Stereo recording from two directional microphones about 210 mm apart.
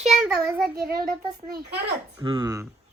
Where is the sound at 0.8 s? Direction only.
45° right (ahead or behind).